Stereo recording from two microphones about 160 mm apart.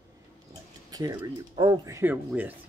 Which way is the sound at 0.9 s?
25° right (ahead or behind).